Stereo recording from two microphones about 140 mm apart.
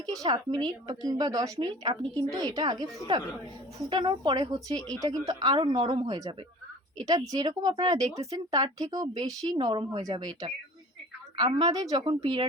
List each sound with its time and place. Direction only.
0.1 s a woman's voice: 25° right (ahead or behind)
3.8 s a woman's voice: 35° right (ahead or behind)
6.1 s a woman's voice: 25° right (ahead or behind)